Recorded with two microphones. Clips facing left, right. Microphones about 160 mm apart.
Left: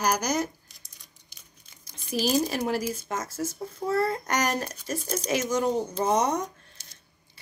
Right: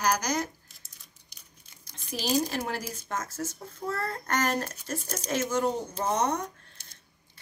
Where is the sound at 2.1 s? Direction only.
10° left (ahead or behind).